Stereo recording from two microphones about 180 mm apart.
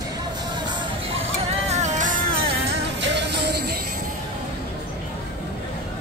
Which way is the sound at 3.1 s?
70° right (ahead or behind).